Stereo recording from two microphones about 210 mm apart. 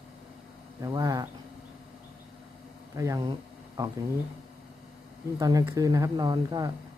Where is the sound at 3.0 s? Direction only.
15° right (ahead or behind).